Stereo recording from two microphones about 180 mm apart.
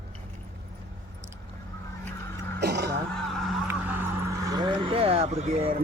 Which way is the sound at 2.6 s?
65° right (ahead or behind).